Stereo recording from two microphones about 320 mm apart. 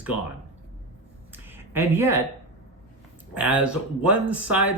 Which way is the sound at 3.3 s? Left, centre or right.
Centre.